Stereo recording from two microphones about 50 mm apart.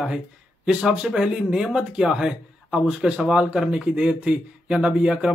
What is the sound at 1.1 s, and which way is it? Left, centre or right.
A man's voice, centre.